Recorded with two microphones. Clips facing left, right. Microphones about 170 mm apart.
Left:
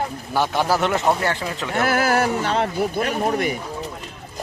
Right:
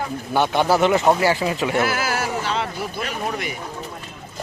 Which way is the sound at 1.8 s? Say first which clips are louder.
Left 4 dB; 50° left (ahead or behind).